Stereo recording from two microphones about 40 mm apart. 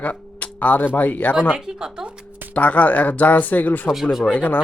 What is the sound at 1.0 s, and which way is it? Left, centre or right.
Speech, left.